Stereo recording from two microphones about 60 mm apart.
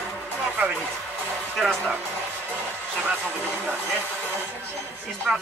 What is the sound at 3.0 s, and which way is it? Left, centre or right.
Speech, right.